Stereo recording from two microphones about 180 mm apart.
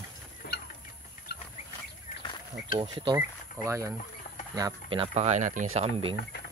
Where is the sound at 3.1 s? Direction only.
15° right (ahead or behind); by 6.1 s 35° right (ahead or behind).